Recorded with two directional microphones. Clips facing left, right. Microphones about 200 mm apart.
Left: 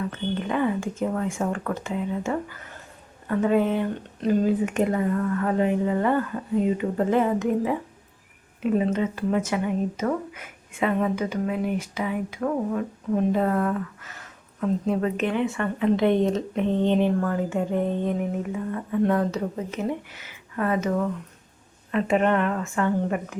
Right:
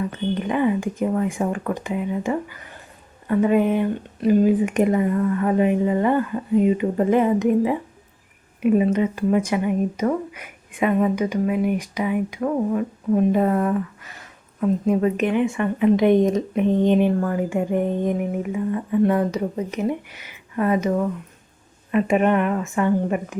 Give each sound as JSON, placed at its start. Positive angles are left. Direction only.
{"t": 0.1, "sound": "a woman's voice", "side_deg": -15}